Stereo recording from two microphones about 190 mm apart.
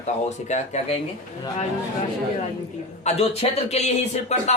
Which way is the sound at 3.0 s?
35° left (ahead or behind).